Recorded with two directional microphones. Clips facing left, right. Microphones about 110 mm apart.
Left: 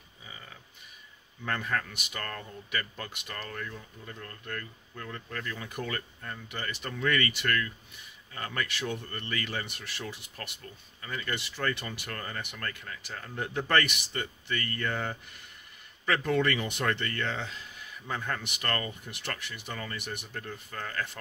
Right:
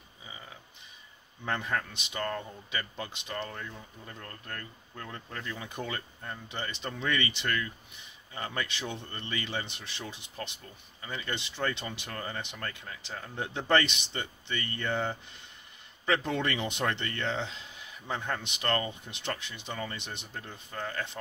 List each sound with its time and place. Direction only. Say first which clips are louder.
1.4 s speech: even; 20° right (ahead or behind)
4.2 s speech: left 3 dB; 35° right (ahead or behind)